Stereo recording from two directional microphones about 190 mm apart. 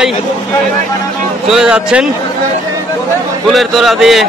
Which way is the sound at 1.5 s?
5° right (ahead or behind).